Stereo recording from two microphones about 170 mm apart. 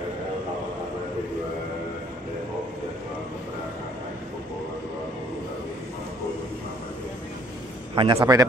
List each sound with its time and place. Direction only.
7.9 s a man's voice: 25° right (ahead or behind)